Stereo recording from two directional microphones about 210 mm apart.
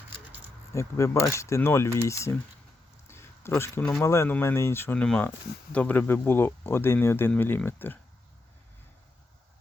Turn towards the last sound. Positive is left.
turn(degrees=10)  # may be behind; listen again after turning